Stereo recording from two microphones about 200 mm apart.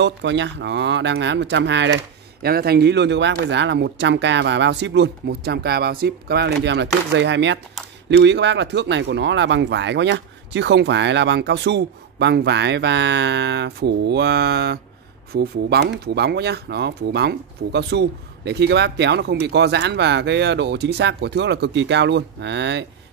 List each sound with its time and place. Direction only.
0.0 s speech: 60° right (ahead or behind)
2.4 s speech: 50° right (ahead or behind)